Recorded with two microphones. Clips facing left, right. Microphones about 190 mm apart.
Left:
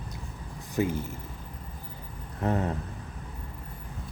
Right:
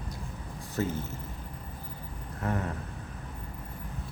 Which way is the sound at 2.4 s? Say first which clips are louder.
Left 4 dB; 20° left (ahead or behind).